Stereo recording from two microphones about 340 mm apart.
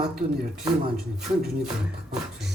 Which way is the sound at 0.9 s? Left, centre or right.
Centre.